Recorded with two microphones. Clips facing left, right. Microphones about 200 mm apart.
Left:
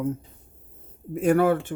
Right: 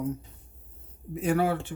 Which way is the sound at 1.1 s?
50° left (ahead or behind).